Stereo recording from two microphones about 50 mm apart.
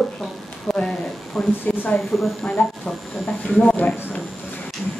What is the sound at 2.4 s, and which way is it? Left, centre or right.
A woman's voice, left.